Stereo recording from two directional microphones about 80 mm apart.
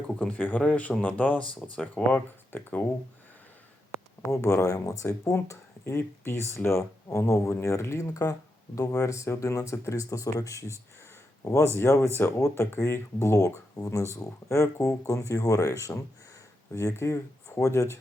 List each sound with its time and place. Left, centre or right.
0.2 s speech: centre
4.3 s speech: left
16.7 s speech: left